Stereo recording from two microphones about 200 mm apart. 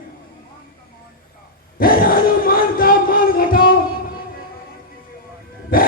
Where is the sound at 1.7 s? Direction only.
45° left (ahead or behind).